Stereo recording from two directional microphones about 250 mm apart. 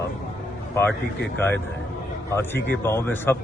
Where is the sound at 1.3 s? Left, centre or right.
Centre.